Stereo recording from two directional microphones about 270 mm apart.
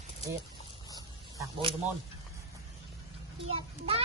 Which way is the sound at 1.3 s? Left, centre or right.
Centre.